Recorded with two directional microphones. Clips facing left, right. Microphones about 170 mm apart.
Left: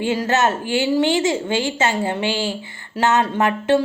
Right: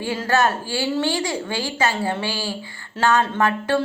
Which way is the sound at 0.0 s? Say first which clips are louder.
Left 2 dB; 20° left (ahead or behind).